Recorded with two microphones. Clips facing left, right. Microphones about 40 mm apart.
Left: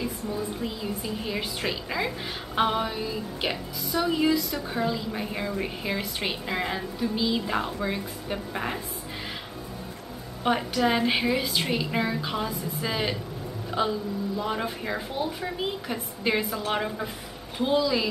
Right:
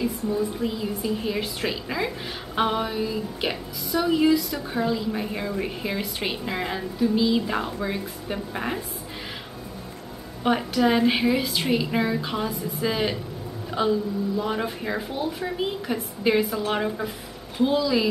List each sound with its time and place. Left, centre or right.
0.0 s a woman's voice: centre
10.4 s a woman's voice: centre